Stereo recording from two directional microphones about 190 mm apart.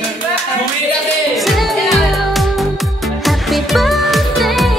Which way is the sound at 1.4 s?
Centre (ahead or behind).